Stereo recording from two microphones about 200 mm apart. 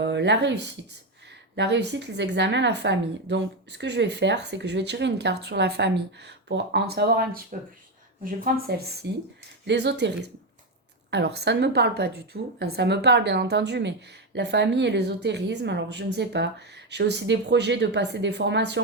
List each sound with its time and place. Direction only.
0.0 s a woman's voice: 60° right (ahead or behind)